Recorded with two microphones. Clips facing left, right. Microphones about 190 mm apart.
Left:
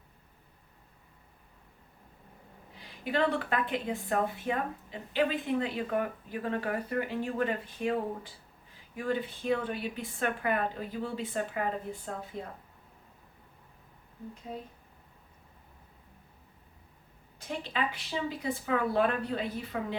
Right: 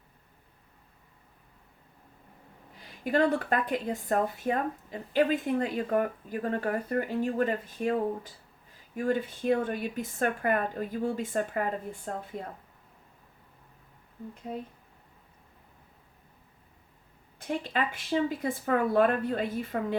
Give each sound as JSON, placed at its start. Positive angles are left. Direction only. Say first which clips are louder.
{"t": 3.0, "sound": "speech", "louder": "right 4 dB", "side_deg": -45}
{"t": 17.6, "sound": "speech", "louder": "right 2 dB", "side_deg": -50}